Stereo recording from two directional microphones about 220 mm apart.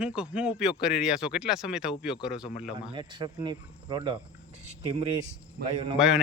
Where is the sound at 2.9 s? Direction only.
20° right (ahead or behind).